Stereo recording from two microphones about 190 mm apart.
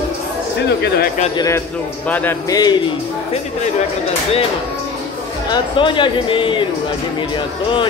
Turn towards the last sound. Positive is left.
turn(degrees=25)  # may be behind; listen again after turning